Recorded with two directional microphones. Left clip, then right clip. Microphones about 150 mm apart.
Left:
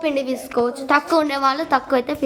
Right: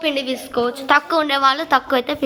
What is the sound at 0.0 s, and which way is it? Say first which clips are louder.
A woman's voice: even; 20° left (ahead or behind).